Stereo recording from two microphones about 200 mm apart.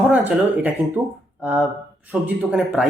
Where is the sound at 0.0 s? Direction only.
5° right (ahead or behind).